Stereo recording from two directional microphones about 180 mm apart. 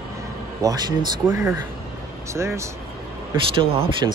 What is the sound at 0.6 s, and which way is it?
Speech, 20° right (ahead or behind).